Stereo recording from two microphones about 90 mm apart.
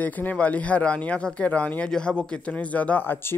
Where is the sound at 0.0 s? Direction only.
15° left (ahead or behind).